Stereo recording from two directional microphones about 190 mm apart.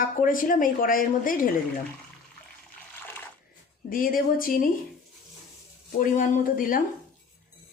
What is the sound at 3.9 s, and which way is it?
Speech, 50° left (ahead or behind).